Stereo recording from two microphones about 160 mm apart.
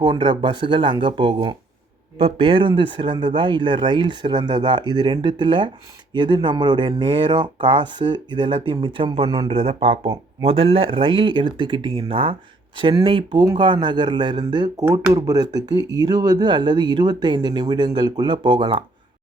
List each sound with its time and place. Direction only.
0.0 s speech: 30° right (ahead or behind)